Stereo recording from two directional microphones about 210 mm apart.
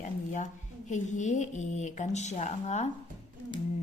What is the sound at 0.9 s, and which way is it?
Speech, 35° left (ahead or behind).